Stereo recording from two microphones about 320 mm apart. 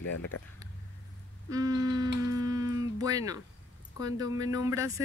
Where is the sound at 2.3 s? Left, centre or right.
Centre.